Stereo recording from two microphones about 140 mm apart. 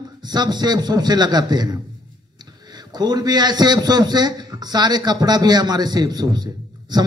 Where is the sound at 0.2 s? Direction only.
30° right (ahead or behind).